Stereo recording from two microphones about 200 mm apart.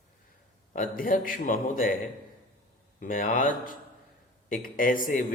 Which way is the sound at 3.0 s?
45° left (ahead or behind).